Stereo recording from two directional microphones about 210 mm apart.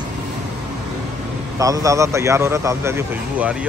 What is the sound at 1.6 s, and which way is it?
Speech, 15° right (ahead or behind).